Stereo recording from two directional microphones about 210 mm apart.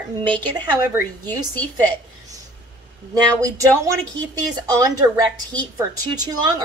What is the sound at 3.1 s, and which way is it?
Speech, 15° right (ahead or behind).